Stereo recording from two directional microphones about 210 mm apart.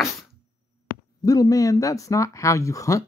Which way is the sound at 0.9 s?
40° left (ahead or behind).